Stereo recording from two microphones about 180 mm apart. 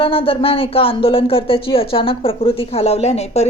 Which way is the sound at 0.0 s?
30° left (ahead or behind).